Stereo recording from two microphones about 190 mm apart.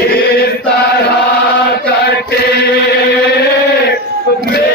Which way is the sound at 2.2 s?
60° left (ahead or behind).